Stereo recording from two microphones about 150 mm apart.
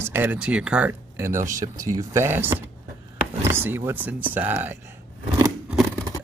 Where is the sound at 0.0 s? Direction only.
15° right (ahead or behind).